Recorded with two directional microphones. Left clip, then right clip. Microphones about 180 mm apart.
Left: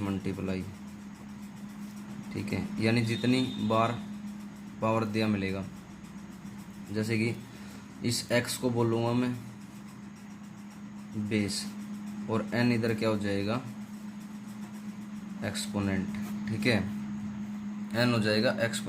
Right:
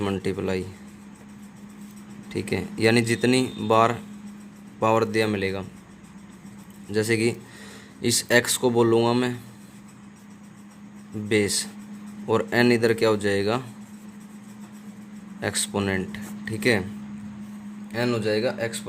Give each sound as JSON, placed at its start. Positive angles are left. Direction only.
{"t": 0.0, "sound": "speech", "side_deg": -55}
{"t": 2.3, "sound": "speech", "side_deg": -50}
{"t": 6.9, "sound": "speech", "side_deg": -55}
{"t": 11.3, "sound": "speech", "side_deg": -50}
{"t": 15.4, "sound": "speech", "side_deg": -50}
{"t": 17.9, "sound": "speech", "side_deg": -20}